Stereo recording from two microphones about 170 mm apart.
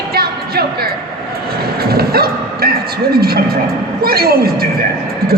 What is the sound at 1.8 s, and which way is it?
Bow-wow, 65° right (ahead or behind).